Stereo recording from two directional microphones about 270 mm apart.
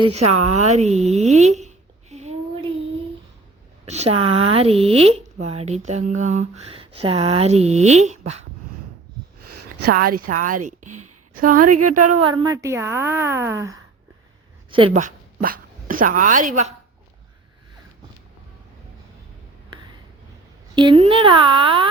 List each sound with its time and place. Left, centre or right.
0.2 s a woman's voice: right
0.7 s a sound: right
3.8 s speech: right
9.8 s a woman's voice: right
11.6 s a woman's voice: right
12.3 s a woman's voice: centre
14.7 s speech: right
20.7 s speech: centre